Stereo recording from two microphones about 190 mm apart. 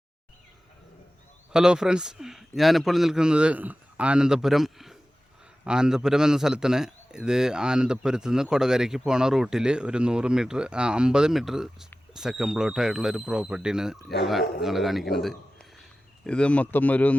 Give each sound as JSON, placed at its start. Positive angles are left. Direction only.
{"t": 1.5, "sound": "a man's voice", "side_deg": -5}